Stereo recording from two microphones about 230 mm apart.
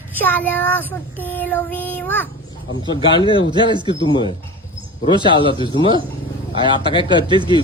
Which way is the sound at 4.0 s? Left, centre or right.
Left.